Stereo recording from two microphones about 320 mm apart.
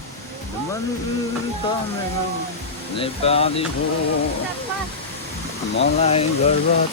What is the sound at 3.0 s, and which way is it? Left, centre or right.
Speech, centre.